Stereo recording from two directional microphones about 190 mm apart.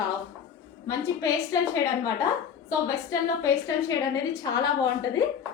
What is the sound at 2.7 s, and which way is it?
A woman's voice, 15° left (ahead or behind).